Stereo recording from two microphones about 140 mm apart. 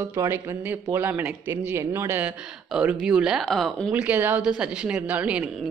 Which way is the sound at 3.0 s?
5° right (ahead or behind).